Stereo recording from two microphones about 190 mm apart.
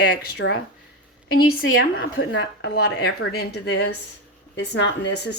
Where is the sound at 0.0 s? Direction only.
55° left (ahead or behind).